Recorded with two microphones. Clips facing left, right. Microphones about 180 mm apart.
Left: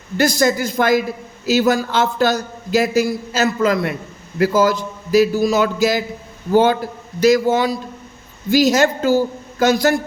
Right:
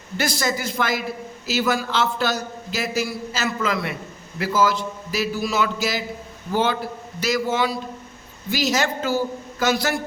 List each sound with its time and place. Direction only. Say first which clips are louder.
0.2 s a man's voice: left 8 dB; 45° left (ahead or behind)